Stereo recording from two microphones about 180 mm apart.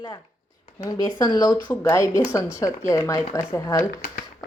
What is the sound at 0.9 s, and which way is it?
A woman's voice, 20° left (ahead or behind).